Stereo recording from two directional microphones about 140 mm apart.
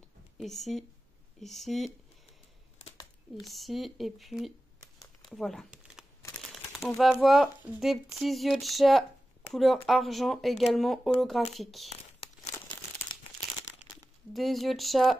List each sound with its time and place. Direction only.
0.4 s speech: centre (ahead or behind)
3.4 s speech: centre (ahead or behind)
7.0 s speech: centre (ahead or behind)
12.2 s crumpling: 45° left (ahead or behind)
13.7 s crumpling: 20° left (ahead or behind)
14.3 s speech: centre (ahead or behind)